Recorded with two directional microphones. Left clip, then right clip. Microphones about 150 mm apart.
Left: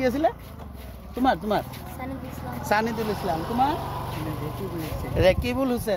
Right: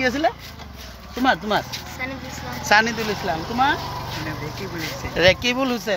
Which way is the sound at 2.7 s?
15° right (ahead or behind).